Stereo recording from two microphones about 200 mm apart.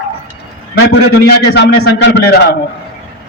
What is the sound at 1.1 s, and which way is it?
A man's voice, 60° left (ahead or behind).